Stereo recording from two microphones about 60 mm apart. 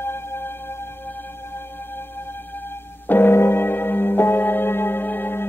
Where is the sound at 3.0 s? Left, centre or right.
Left.